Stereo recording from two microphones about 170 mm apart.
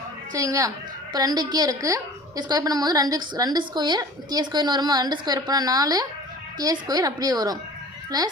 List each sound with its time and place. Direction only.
0.3 s a woman's voice: 20° right (ahead or behind)